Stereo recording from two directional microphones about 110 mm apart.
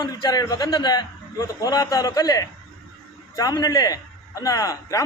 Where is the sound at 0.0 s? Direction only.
40° left (ahead or behind).